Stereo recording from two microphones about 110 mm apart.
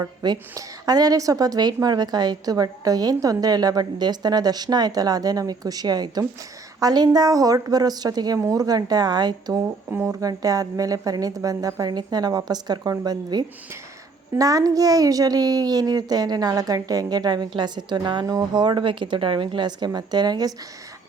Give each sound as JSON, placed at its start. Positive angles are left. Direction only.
{"t": 0.0, "sound": "a woman's voice", "side_deg": -35}
{"t": 9.9, "sound": "a woman's voice", "side_deg": -25}